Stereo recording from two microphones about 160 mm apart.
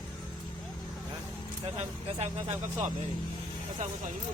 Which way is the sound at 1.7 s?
45° right (ahead or behind).